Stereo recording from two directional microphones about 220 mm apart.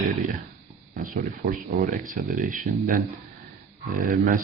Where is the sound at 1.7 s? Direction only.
35° right (ahead or behind).